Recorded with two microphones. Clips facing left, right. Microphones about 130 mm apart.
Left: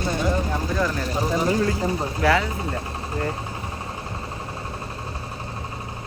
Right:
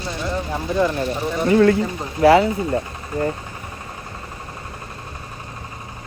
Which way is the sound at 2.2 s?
30° right (ahead or behind).